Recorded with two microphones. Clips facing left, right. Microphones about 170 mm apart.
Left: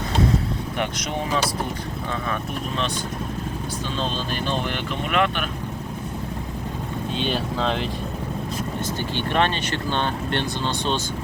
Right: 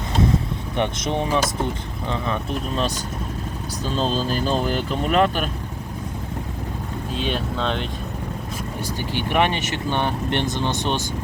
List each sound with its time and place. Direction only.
0.8 s speech: 25° right (ahead or behind)
2.7 s speech: 40° right (ahead or behind)
7.1 s speech: centre (ahead or behind)
8.8 s speech: 15° right (ahead or behind)